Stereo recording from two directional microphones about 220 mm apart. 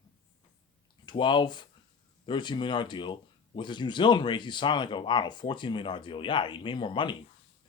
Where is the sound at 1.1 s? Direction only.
20° left (ahead or behind).